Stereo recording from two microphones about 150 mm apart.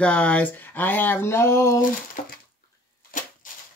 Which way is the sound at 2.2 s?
55° left (ahead or behind).